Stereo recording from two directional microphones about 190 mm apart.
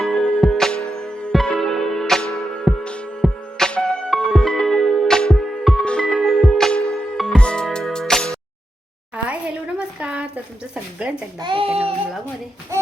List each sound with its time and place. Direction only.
0.0 s music: centre (ahead or behind)
9.1 s a sound: 5° right (ahead or behind)
11.3 s speech: 25° right (ahead or behind)